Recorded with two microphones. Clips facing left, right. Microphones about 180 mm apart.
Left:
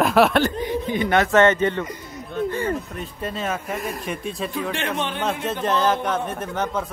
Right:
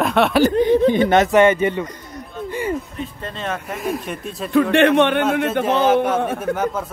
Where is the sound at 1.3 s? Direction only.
10° right (ahead or behind).